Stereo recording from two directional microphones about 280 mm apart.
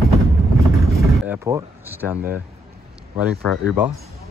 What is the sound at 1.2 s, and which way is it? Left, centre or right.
Speech, centre.